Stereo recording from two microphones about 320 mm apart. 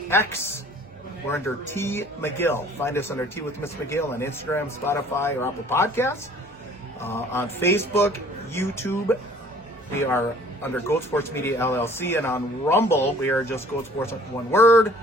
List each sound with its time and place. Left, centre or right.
0.1 s speech: centre